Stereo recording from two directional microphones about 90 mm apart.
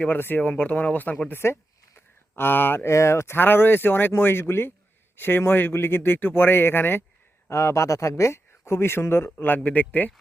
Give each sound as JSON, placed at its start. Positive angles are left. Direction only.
{"t": 0.0, "sound": "speech", "side_deg": 20}